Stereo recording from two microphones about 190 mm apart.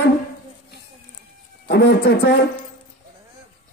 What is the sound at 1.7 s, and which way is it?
Speech, 60° left (ahead or behind).